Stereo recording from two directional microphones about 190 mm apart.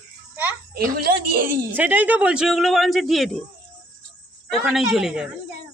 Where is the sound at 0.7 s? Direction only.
50° right (ahead or behind).